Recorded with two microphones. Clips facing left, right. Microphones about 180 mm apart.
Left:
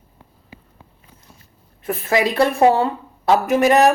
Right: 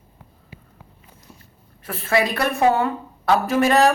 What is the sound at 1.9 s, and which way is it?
Speech, 20° left (ahead or behind).